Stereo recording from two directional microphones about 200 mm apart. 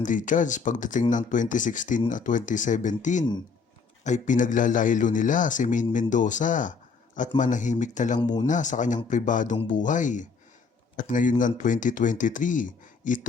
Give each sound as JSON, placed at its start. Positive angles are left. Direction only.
{"t": 0.0, "sound": "speech", "side_deg": 40}
{"t": 8.2, "sound": "speech", "side_deg": 20}
{"t": 8.4, "sound": "speech", "side_deg": 40}